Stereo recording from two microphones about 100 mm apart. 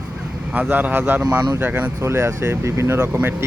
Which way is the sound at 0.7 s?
15° right (ahead or behind).